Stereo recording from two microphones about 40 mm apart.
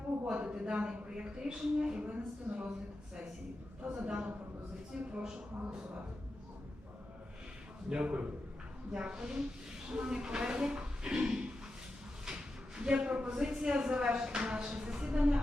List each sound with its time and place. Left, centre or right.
0.4 s speech: right
3.9 s speech: right
8.0 s a man's voice: right